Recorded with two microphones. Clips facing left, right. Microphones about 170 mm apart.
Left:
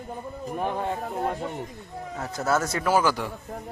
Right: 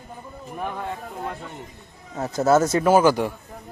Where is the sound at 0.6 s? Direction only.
30° left (ahead or behind).